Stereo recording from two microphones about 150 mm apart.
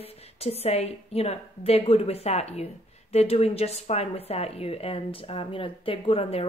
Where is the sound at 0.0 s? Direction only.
45° left (ahead or behind).